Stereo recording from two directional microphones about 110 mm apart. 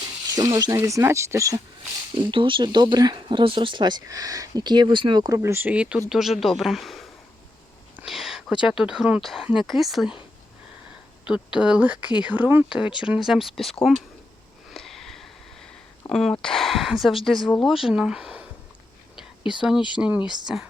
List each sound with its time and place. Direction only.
0.3 s speech: 35° right (ahead or behind)
2.1 s speech: 50° right (ahead or behind); by 10.2 s 5° right (ahead or behind)
11.3 s speech: 10° right (ahead or behind)
14.7 s sniff: centre (ahead or behind)
16.0 s speech: centre (ahead or behind)
19.4 s speech: 45° left (ahead or behind)
20.0 s speech: 10° right (ahead or behind)